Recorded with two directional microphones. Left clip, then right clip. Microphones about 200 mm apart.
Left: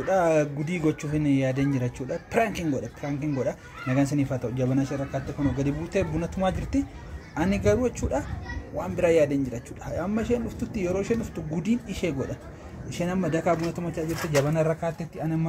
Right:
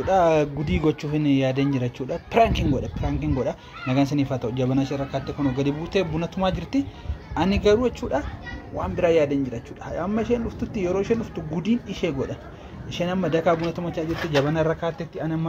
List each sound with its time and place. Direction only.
0.0 s speech: 15° right (ahead or behind)